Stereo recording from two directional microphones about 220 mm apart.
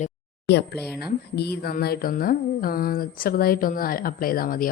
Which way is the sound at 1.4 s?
45° left (ahead or behind).